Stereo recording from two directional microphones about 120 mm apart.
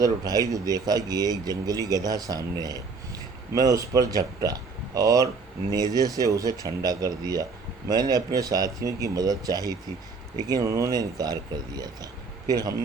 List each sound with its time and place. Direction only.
0.0 s speech: 30° right (ahead or behind)